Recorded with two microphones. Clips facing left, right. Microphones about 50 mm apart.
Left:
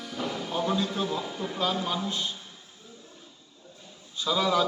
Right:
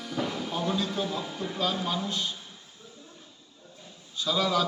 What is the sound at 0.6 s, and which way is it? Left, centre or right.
A man's voice, centre.